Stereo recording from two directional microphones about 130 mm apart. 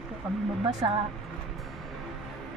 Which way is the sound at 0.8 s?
30° right (ahead or behind).